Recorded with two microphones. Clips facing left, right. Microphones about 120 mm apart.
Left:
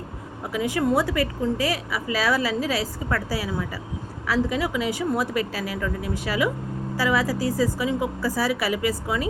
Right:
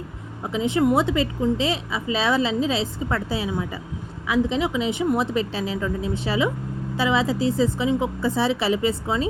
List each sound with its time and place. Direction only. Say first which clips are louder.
0.4 s a woman's voice: right 3 dB; 25° right (ahead or behind)